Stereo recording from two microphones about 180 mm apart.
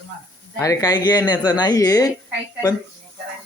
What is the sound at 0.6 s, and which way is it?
Speech, 20° left (ahead or behind).